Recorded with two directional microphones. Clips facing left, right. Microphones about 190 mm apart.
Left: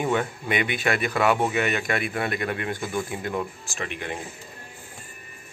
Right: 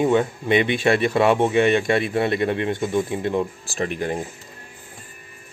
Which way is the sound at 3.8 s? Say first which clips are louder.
Right 8 dB; 40° right (ahead or behind).